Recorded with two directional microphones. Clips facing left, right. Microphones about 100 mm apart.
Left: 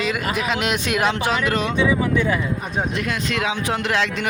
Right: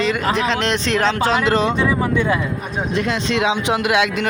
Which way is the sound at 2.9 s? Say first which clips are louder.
Right 4 dB; 25° right (ahead or behind).